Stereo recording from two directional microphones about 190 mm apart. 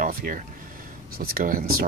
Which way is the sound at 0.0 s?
45° right (ahead or behind).